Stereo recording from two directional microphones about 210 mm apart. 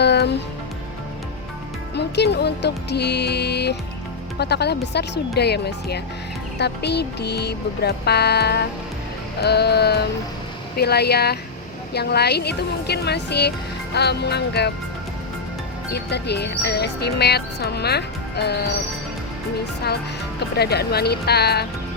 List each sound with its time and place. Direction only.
0.0 s music: 50° left (ahead or behind)
2.0 s speech: 55° left (ahead or behind)
15.9 s speech: 50° left (ahead or behind)
20.6 s speech: 50° left (ahead or behind)